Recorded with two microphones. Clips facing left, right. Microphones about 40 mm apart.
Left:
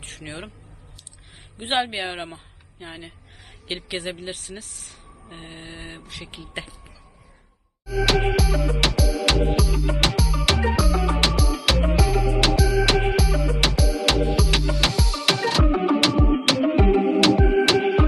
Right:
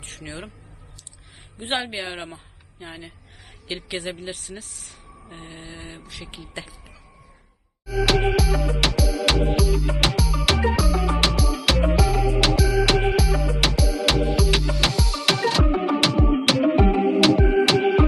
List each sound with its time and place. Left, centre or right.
0.2 s speech: centre
1.7 s speech: centre
5.6 s speech: centre
7.9 s music: centre